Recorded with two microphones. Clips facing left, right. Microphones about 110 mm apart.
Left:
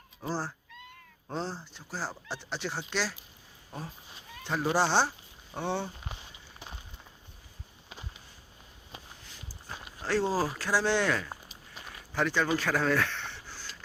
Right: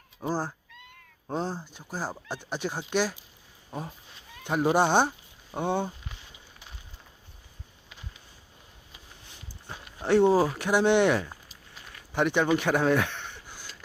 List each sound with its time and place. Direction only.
0.2 s speech: 15° right (ahead or behind)
9.6 s speech: 20° right (ahead or behind)
12.1 s a sound: 20° right (ahead or behind)